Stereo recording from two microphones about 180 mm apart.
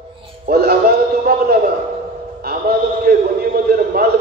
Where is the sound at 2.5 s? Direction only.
60° right (ahead or behind).